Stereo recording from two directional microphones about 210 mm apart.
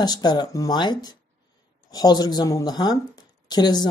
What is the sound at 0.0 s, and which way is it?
Speech, 20° left (ahead or behind).